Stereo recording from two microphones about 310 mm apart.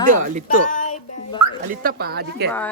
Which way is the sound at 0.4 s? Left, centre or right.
Left.